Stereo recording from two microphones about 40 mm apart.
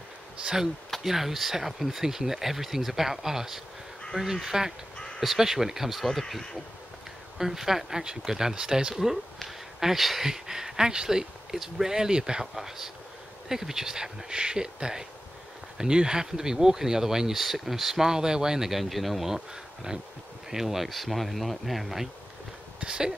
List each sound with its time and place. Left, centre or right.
1.0 s speech: centre
5.9 s speech: centre
7.3 s speech: centre
8.9 s speech: centre
10.2 s speech: centre
18.0 s speech: centre
18.7 s speech: centre
22.8 s a sound: right